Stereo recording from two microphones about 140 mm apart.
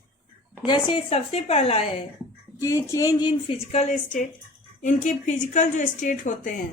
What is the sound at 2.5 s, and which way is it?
Speech, 20° left (ahead or behind).